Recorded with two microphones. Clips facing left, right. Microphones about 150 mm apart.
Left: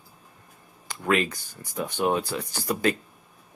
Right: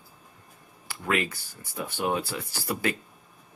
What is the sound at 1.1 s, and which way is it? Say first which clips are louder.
Speech: left 2 dB; 15° left (ahead or behind).